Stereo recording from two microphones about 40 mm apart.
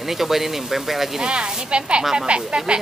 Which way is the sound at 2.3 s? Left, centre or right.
Right.